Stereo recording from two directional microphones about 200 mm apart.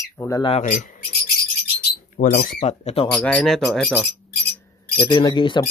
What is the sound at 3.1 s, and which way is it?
Speech, 5° left (ahead or behind).